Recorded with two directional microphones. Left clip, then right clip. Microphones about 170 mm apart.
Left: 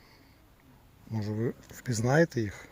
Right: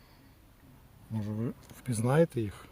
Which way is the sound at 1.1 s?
30° left (ahead or behind).